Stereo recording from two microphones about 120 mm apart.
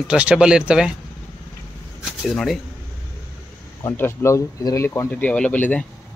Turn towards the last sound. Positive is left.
turn(degrees=10)  # may be behind; listen again after turning